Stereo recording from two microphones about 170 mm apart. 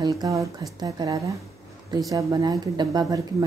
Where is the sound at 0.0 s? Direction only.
20° right (ahead or behind).